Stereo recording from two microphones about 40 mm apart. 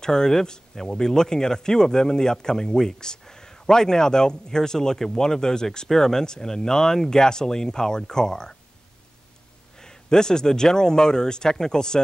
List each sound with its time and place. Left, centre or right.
0.0 s speech: centre
9.8 s speech: centre